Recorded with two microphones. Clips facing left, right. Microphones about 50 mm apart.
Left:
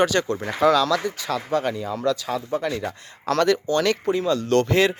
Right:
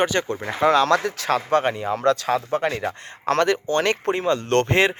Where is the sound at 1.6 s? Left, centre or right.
Right.